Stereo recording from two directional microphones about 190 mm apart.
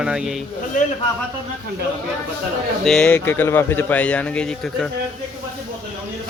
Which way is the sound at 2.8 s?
5° left (ahead or behind).